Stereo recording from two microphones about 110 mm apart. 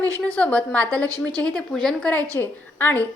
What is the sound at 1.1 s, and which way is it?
Speech, 35° right (ahead or behind).